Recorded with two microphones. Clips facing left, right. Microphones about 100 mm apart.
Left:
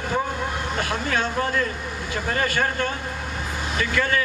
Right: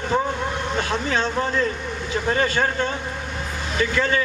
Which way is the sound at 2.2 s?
20° right (ahead or behind).